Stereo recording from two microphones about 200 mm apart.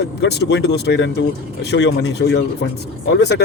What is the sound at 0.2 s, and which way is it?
Speech, 60° left (ahead or behind).